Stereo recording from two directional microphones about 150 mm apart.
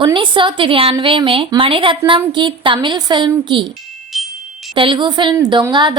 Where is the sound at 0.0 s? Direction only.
30° right (ahead or behind).